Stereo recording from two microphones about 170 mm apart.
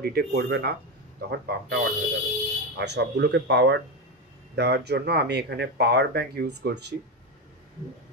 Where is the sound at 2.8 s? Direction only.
80° right.